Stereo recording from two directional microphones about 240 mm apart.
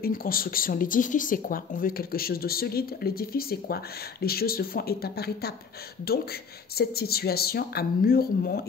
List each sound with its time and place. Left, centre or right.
0.0 s speech: left